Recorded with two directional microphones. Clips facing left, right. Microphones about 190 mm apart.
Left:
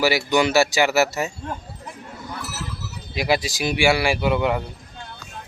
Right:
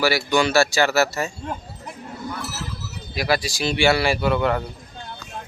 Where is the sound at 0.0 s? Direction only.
20° left (ahead or behind).